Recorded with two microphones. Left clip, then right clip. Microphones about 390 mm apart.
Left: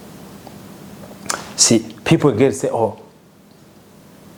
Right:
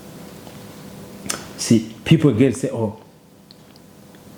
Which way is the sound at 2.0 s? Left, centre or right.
Left.